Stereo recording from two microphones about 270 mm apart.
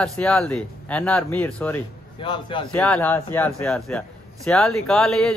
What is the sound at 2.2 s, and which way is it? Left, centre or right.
Speech, centre.